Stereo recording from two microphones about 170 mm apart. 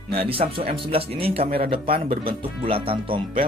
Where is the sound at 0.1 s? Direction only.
35° right (ahead or behind).